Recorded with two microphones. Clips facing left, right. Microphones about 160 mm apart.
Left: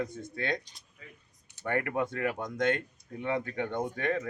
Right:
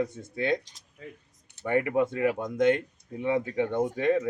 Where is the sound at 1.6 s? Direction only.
15° right (ahead or behind).